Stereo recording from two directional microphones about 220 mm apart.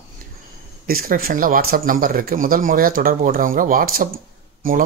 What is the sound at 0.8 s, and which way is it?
A man's voice, 40° right (ahead or behind).